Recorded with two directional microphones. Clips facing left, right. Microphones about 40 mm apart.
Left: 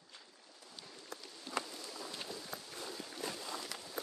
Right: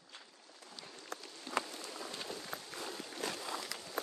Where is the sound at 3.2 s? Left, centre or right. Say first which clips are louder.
Right 3 dB; right.